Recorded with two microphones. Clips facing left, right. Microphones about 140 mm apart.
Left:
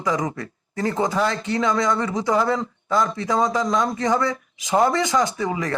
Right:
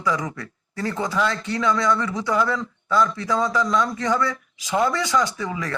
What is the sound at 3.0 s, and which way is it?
Speech, 25° left (ahead or behind).